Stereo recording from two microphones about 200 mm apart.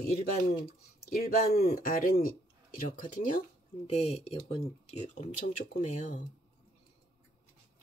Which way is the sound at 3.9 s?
30° left (ahead or behind).